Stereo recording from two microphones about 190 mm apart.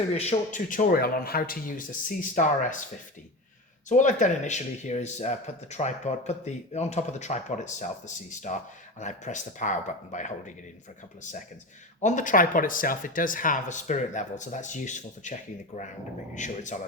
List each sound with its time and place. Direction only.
0.1 s speech: 35° left (ahead or behind)
3.8 s speech: 40° left (ahead or behind)
11.9 s speech: 40° left (ahead or behind)